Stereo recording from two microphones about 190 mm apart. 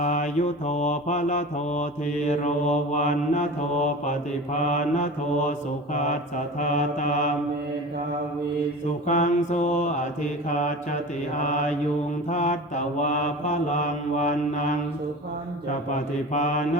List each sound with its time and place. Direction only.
0.0 s mantra: 40° left (ahead or behind)
9.0 s mantra: 40° left (ahead or behind)
15.9 s mantra: 40° left (ahead or behind)